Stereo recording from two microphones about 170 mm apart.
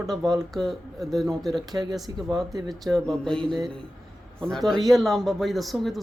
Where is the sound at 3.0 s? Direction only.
5° left (ahead or behind).